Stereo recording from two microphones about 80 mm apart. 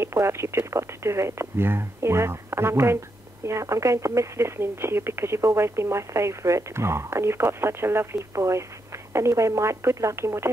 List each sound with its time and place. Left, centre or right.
0.0 s speech: right